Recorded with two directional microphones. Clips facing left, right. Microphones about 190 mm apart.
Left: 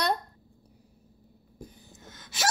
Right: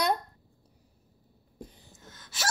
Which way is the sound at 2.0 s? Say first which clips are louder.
Left 4 dB; 20° left (ahead or behind).